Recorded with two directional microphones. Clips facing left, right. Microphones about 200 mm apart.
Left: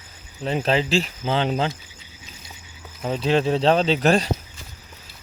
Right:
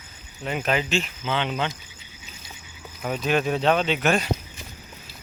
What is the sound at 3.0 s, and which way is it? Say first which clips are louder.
Speech: left 3 dB; 25° left (ahead or behind).